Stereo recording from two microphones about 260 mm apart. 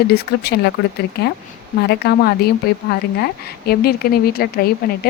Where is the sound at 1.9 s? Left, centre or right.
Left.